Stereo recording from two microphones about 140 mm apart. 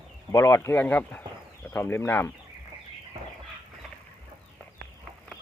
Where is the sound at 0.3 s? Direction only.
25° left (ahead or behind).